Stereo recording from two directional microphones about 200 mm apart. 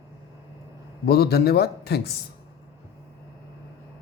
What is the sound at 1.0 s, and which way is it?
Speech, 50° left (ahead or behind).